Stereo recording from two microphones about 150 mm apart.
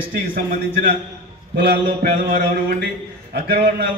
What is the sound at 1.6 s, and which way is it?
Mantra, 85° right.